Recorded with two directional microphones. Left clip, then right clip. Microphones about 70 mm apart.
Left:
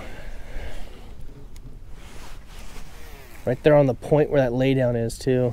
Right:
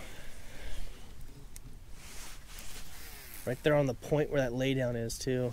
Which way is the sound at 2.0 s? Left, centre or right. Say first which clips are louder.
Left 4 dB; centre.